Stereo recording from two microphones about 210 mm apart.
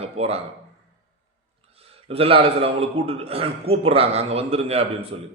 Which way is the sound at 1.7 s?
25° right (ahead or behind).